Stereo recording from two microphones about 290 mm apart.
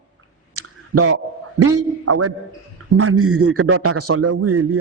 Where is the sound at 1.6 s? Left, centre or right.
Right.